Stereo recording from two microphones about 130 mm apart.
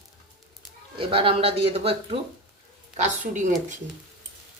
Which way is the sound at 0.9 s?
45° right (ahead or behind).